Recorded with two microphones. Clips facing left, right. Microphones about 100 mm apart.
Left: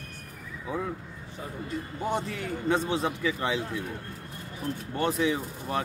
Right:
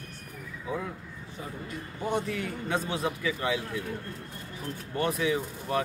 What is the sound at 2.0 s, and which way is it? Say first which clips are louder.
A man's voice: right 1 dB; 30° left (ahead or behind).